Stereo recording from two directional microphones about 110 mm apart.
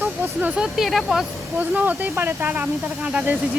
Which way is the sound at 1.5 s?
15° right (ahead or behind).